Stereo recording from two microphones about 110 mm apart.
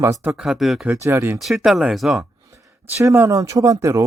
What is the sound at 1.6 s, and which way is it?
Speech, centre (ahead or behind).